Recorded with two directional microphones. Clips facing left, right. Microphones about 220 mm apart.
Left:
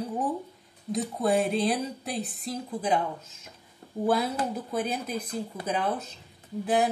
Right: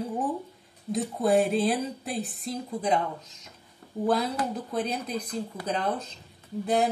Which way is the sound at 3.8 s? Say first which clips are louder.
Even; 25° left (ahead or behind).